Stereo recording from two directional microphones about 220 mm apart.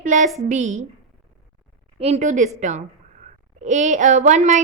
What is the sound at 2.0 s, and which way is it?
A woman's voice, 30° right (ahead or behind).